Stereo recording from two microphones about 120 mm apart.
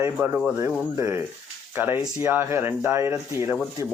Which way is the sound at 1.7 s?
20° right (ahead or behind).